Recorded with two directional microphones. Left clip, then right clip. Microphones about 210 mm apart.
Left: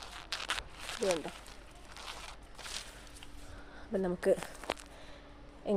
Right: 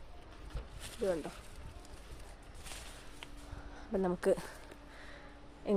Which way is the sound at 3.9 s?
5° right (ahead or behind).